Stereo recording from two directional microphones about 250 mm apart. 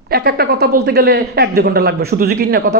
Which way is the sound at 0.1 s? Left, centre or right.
Right.